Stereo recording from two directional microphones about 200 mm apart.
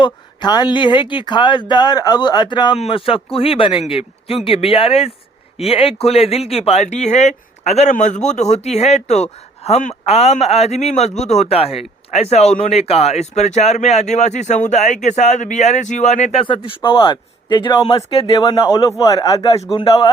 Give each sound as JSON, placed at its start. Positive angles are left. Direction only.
{"t": 0.0, "sound": "speech", "side_deg": 20}